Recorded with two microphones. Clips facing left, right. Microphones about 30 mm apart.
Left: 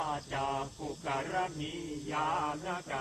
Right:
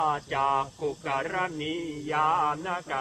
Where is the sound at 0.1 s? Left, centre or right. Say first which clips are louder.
Right 8 dB; right.